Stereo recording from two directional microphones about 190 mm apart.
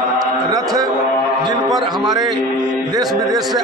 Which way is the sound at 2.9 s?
20° right (ahead or behind).